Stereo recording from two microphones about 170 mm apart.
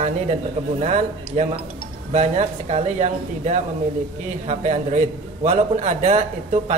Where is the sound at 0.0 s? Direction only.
45° right (ahead or behind).